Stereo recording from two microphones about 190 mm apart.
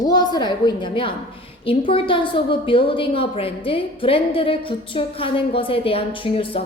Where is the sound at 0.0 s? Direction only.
20° left (ahead or behind).